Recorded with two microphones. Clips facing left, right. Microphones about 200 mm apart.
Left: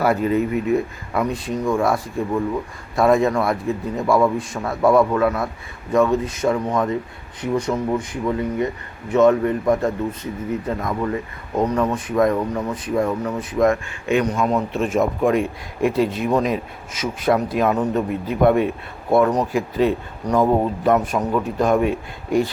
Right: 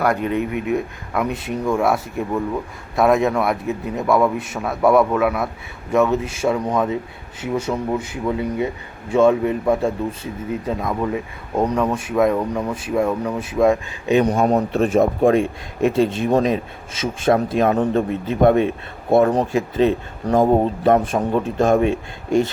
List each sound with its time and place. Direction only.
0.0 s a man's voice: 5° left (ahead or behind); by 14.2 s 15° right (ahead or behind)
14.3 s speech: 40° right (ahead or behind)